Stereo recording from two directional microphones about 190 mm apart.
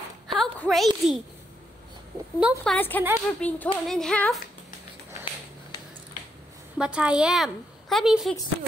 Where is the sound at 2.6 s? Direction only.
5° left (ahead or behind).